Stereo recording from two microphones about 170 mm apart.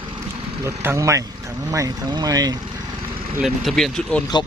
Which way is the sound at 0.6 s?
15° right (ahead or behind).